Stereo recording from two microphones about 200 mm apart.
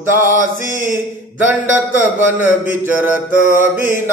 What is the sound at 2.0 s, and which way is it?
Mantra, 10° right (ahead or behind).